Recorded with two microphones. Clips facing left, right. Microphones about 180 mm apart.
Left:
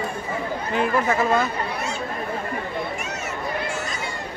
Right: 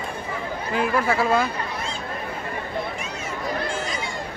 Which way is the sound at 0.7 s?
5° right (ahead or behind).